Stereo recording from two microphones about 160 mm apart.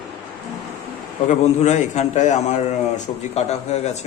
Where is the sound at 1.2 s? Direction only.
50° left (ahead or behind).